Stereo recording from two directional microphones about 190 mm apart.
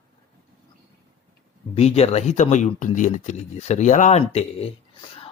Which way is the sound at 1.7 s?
35° left (ahead or behind).